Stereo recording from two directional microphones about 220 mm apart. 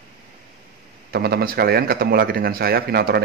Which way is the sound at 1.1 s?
45° right (ahead or behind).